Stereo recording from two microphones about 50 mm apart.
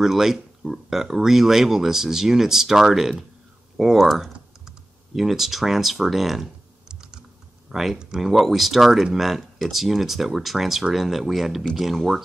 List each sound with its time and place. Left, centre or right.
0.0 s speech: centre